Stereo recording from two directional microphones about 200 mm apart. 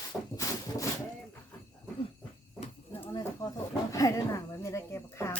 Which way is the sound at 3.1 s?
20° left (ahead or behind).